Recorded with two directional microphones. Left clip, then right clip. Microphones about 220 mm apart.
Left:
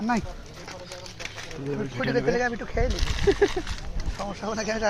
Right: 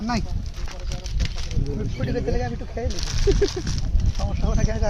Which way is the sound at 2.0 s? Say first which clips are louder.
Left 4 dB; 5° right (ahead or behind).